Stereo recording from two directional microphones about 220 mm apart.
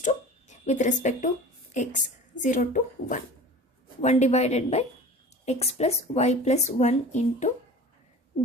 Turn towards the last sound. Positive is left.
turn(degrees=30)  # may be behind; listen again after turning